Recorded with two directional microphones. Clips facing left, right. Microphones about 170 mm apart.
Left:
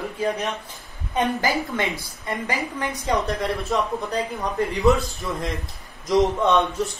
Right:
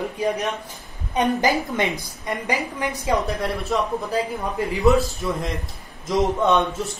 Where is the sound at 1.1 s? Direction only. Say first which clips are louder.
Right 2 dB; 20° right (ahead or behind).